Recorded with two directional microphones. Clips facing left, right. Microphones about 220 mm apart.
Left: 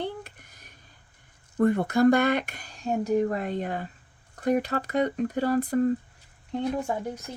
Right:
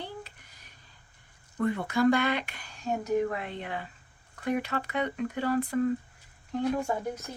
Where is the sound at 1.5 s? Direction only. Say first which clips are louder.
Left 6 dB; 45° left (ahead or behind).